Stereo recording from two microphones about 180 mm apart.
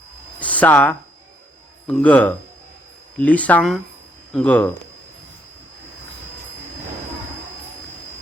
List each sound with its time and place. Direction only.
0.3 s speech: 10° left (ahead or behind)